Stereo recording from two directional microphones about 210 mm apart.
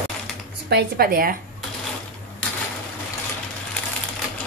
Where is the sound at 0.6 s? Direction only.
50° right (ahead or behind).